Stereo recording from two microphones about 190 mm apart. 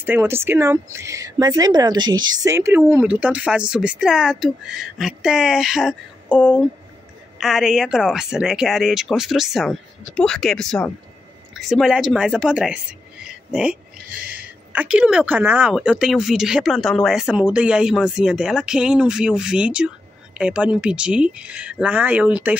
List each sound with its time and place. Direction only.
0.0 s a woman's voice: 10° right (ahead or behind)